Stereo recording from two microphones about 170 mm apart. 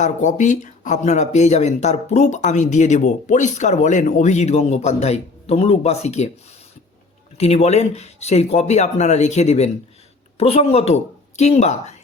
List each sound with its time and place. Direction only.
0.0 s speech: 45° left (ahead or behind)
7.3 s speech: 40° left (ahead or behind)